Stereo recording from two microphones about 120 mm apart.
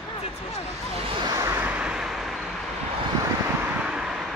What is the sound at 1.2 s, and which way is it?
Vehicle, 30° right (ahead or behind).